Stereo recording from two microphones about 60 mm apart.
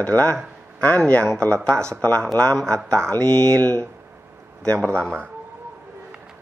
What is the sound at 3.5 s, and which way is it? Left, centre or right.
Speech, left.